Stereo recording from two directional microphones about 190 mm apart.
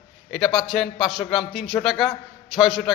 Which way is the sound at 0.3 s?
Centre (ahead or behind).